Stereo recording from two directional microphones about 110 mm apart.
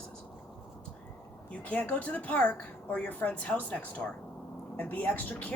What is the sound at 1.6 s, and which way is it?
A woman's voice, 15° left (ahead or behind).